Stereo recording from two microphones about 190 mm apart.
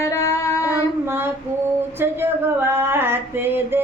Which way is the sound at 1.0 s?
10° right (ahead or behind).